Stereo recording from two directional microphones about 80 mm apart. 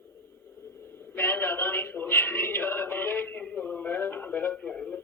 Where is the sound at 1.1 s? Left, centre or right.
Left.